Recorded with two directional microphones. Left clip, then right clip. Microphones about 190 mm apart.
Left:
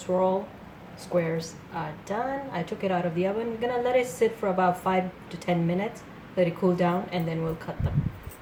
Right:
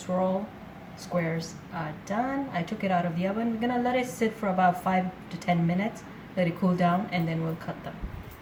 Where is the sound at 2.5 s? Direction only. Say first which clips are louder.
Even; 15° left (ahead or behind).